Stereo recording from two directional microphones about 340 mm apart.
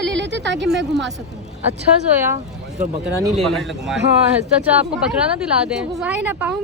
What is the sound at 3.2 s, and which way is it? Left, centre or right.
Speech, centre.